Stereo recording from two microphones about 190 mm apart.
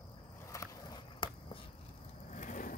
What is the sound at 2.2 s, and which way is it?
Vehicle, 40° left (ahead or behind).